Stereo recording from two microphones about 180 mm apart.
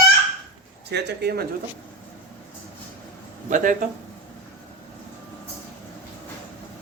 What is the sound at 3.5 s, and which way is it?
Speech, 45° right (ahead or behind).